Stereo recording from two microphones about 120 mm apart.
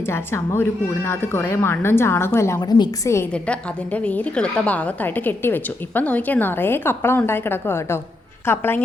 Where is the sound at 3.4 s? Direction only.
10° left (ahead or behind).